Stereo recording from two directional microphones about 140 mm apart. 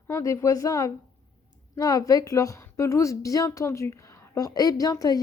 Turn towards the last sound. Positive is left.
turn(degrees=25)  # may be behind; listen again after turning